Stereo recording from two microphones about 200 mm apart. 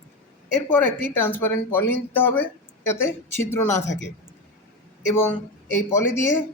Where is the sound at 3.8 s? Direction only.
65° left (ahead or behind).